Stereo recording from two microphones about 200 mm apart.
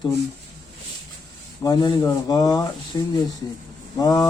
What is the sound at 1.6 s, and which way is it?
Speech, 20° left (ahead or behind).